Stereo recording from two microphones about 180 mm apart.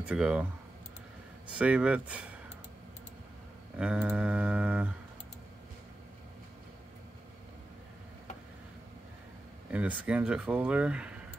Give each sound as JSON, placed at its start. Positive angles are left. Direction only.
{"t": 0.1, "sound": "speech", "side_deg": -5}
{"t": 1.6, "sound": "speech", "side_deg": -5}
{"t": 3.7, "sound": "speech", "side_deg": -5}
{"t": 9.7, "sound": "speech", "side_deg": -5}